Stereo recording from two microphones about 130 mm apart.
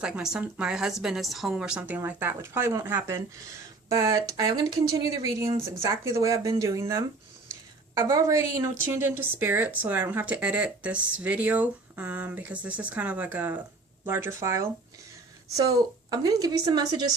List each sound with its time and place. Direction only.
0.0 s a woman's voice: 5° right (ahead or behind); by 17.1 s 30° right (ahead or behind)